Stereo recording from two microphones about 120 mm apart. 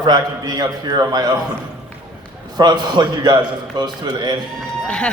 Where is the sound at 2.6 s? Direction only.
35° right (ahead or behind).